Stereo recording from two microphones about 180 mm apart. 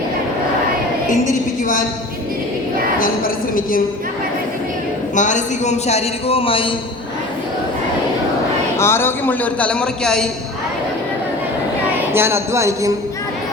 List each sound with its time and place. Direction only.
1.3 s a woman's voice: 45° left (ahead or behind)
5.1 s a man's voice: 45° left (ahead or behind)
8.8 s a man's voice: 15° left (ahead or behind)
12.1 s a sound: 15° right (ahead or behind)